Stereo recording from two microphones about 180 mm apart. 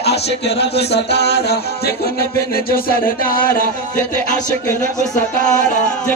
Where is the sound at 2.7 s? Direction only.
55° left (ahead or behind).